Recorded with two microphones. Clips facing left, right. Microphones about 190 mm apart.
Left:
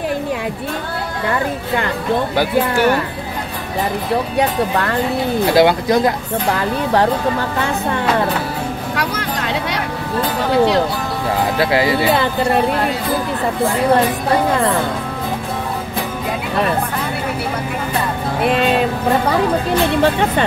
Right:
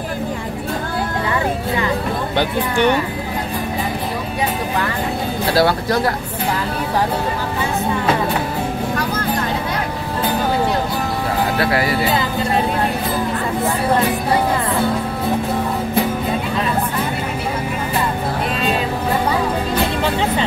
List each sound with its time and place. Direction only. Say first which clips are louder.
2.3 s speech: even; 5° left (ahead or behind)
5.5 s speech: left 3 dB; 20° left (ahead or behind)
8.9 s music: right 1 dB; 75° left (ahead or behind)
11.6 s speech: left 4 dB; 25° left (ahead or behind)
20.0 s speech: left 3 dB; 55° left (ahead or behind)